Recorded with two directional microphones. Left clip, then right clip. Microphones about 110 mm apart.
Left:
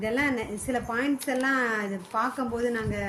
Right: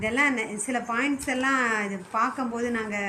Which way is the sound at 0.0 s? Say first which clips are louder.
Right 3 dB; 20° left (ahead or behind).